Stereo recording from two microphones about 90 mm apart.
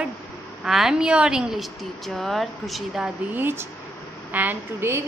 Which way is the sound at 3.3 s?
25° right (ahead or behind).